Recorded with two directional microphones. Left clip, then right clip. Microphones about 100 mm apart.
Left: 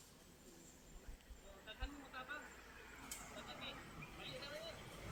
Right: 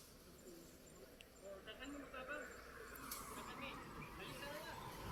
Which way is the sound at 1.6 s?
25° left (ahead or behind).